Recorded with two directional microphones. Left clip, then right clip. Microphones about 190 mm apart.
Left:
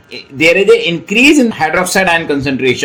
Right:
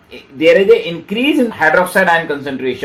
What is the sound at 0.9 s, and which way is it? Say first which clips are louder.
Speech: left 7 dB; 45° left (ahead or behind).